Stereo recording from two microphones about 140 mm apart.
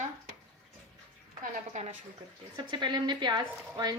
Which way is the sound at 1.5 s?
55° right (ahead or behind).